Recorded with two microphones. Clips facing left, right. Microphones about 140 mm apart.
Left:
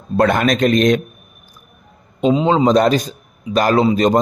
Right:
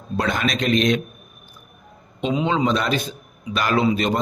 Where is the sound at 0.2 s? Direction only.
55° left (ahead or behind).